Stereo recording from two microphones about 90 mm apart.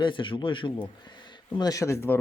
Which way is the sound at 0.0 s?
65° left (ahead or behind).